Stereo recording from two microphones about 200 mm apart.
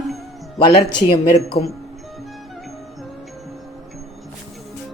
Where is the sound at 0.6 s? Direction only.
25° left (ahead or behind).